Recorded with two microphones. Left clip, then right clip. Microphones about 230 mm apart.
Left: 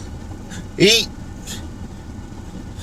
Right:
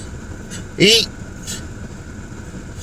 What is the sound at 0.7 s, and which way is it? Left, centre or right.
Speech, centre.